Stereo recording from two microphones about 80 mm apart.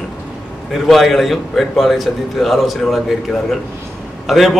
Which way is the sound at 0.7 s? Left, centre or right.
Centre.